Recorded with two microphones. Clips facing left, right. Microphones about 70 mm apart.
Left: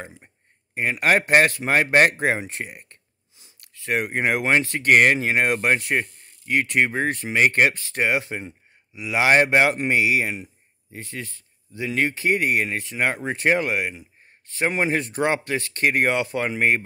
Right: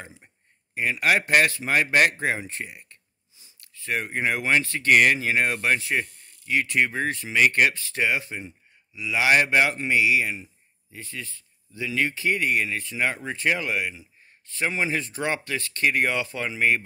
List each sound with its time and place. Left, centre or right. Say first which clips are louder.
0.7 s a man's voice: left 2 dB; left